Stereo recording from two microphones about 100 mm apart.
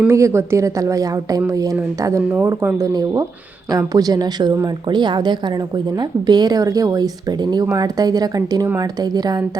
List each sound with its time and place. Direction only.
0.1 s a woman's voice: 30° right (ahead or behind)